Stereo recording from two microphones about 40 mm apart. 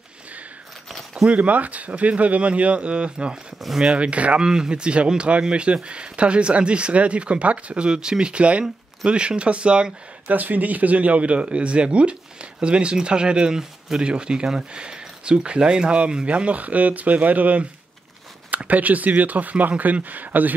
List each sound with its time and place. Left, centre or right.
1.3 s speech: right
4.4 s speech: centre
10.2 s speech: right